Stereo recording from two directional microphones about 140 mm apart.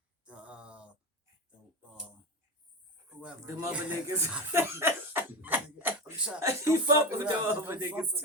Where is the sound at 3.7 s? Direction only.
10° right (ahead or behind).